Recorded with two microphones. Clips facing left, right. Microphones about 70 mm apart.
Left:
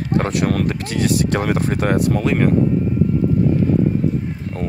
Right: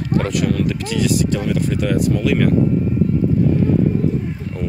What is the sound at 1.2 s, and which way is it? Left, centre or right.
Speech, left.